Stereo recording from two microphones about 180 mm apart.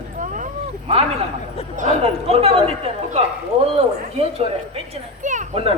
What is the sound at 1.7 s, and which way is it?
A woman's voice, 40° right (ahead or behind).